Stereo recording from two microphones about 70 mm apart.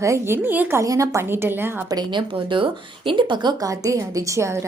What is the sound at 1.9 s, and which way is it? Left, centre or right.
Speech, right.